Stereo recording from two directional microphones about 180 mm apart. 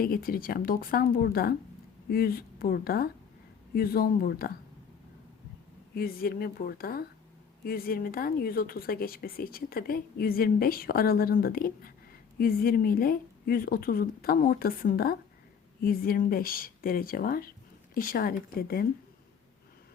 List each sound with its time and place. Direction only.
0.0 s speech: 55° left (ahead or behind)
5.9 s speech: 55° left (ahead or behind)